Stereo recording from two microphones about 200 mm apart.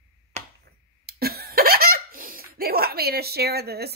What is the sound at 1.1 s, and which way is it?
Laughter, 50° right (ahead or behind).